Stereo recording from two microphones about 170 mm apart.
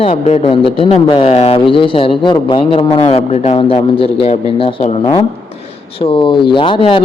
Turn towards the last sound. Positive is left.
turn(degrees=30)  # may be behind; listen again after turning